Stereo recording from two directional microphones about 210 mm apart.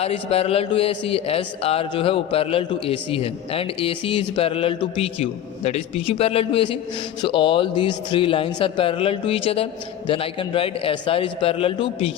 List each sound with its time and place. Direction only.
0.0 s a man's voice: 30° left (ahead or behind)